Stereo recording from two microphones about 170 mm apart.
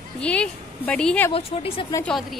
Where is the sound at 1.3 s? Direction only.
35° left (ahead or behind).